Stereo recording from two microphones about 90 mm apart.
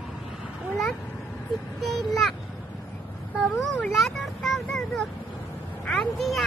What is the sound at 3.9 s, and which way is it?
Vehicle, 5° left (ahead or behind).